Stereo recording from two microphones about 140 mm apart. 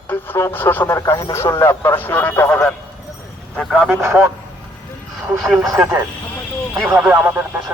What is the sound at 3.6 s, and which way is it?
Speech, 5° right (ahead or behind).